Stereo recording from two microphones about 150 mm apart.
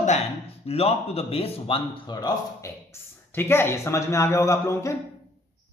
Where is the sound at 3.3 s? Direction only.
15° left (ahead or behind).